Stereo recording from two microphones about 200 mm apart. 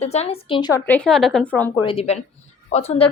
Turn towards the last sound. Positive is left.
turn(degrees=30)  # may be behind; listen again after turning